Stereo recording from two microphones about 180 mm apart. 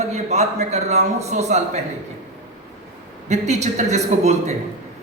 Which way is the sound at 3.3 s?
40° right (ahead or behind).